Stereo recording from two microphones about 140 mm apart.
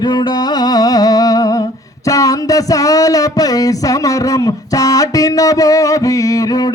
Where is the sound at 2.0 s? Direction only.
25° left (ahead or behind).